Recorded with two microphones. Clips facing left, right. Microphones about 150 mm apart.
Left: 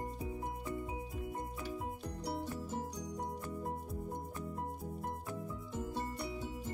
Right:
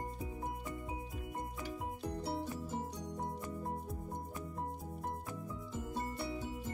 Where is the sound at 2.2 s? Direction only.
Centre (ahead or behind).